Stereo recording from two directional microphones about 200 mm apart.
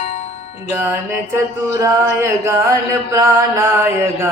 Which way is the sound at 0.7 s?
10° right (ahead or behind).